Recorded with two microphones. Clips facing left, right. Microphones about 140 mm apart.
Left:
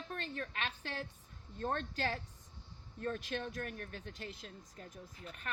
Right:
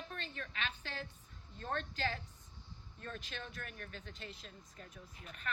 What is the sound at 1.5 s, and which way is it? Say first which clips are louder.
Speech: left 3 dB; 45° left (ahead or behind).